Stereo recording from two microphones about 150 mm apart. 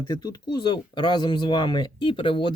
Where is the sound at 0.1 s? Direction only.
30° left (ahead or behind).